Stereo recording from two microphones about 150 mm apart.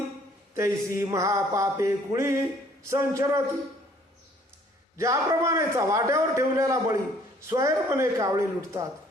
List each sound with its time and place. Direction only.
0.5 s a man's voice: 20° right (ahead or behind)
4.9 s a man's voice: 20° right (ahead or behind)